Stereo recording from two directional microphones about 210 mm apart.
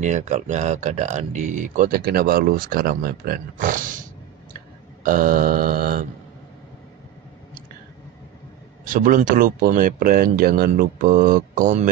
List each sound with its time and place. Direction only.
0.0 s speech: 35° right (ahead or behind)
5.0 s speech: 40° right (ahead or behind)
8.8 s speech: 40° right (ahead or behind)